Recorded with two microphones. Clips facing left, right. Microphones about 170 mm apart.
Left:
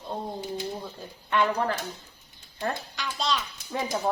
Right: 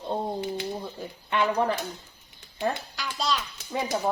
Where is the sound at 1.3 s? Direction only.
10° right (ahead or behind).